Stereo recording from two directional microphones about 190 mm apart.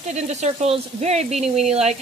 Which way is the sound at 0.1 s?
35° right (ahead or behind).